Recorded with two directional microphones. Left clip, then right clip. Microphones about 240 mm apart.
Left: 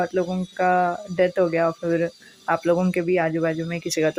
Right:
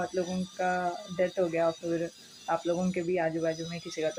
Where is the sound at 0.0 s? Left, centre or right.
Left.